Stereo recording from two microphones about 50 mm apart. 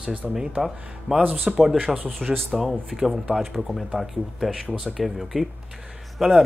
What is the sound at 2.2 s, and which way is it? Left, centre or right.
Speech, centre.